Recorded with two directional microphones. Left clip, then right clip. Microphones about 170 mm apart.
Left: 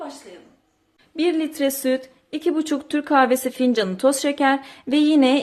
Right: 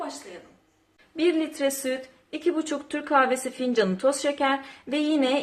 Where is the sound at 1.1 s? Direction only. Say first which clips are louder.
Left 3 dB; 55° left (ahead or behind).